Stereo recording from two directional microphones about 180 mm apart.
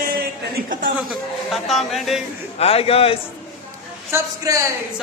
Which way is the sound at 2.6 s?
35° left (ahead or behind).